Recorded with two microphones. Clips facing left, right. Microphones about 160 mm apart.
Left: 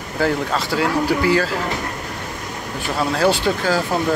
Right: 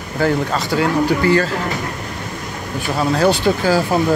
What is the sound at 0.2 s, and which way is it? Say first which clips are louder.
Speech: right 2 dB; 5° left (ahead or behind).